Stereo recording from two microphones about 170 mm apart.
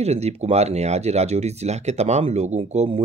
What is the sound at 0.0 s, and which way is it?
Speech, 40° right (ahead or behind).